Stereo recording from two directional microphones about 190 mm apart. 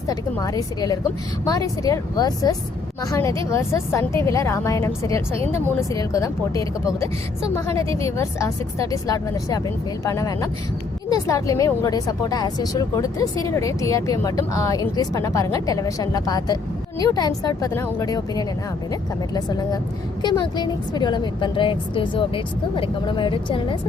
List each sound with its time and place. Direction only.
0.1 s a woman's voice: 20° left (ahead or behind)
7.9 s a woman's voice: 15° left (ahead or behind)